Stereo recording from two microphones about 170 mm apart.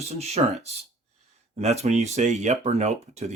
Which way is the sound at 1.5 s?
40° right (ahead or behind).